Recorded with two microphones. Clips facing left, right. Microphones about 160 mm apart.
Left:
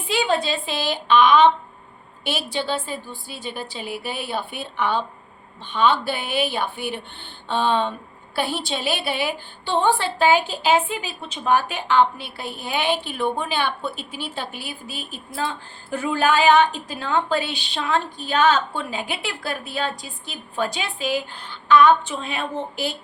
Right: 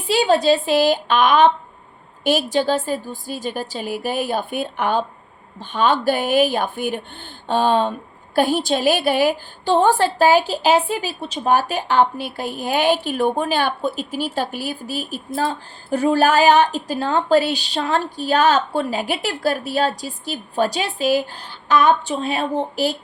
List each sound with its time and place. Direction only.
0.1 s a woman's voice: 35° right (ahead or behind)